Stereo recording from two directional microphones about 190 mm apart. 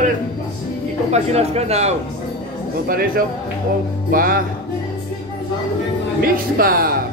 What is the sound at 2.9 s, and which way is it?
A man's voice, 50° right (ahead or behind).